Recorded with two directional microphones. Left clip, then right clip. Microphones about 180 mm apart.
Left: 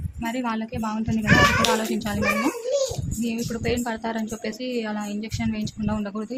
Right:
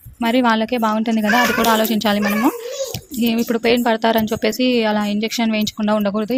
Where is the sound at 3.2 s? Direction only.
40° right (ahead or behind).